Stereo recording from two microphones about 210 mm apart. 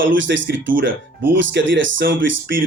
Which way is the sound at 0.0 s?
60° right (ahead or behind).